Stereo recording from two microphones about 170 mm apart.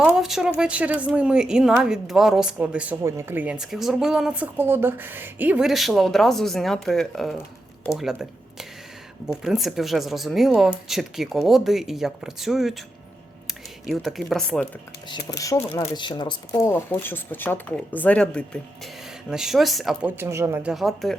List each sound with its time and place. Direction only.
0.2 s speech: centre (ahead or behind)
15.3 s speech: 20° left (ahead or behind)
16.0 s speech: 25° left (ahead or behind); by 21.2 s centre (ahead or behind)